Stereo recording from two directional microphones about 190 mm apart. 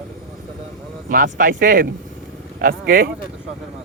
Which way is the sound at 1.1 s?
45° right (ahead or behind).